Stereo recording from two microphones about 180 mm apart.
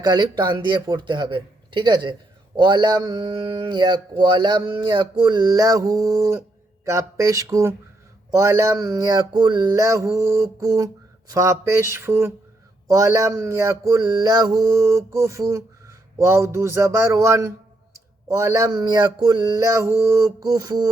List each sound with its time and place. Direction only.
0.0 s speech: 25° right (ahead or behind)
6.8 s a sound: 15° right (ahead or behind)
18.3 s speech: 15° right (ahead or behind)